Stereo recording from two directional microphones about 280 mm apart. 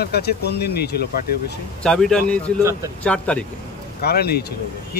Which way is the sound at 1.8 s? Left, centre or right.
Centre.